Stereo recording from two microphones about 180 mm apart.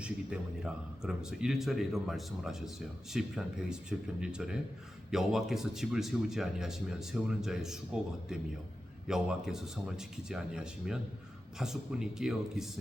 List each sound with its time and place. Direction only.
0.0 s speech: 5° right (ahead or behind)